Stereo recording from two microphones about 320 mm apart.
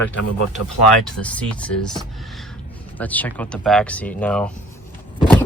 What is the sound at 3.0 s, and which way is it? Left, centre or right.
Speech, centre.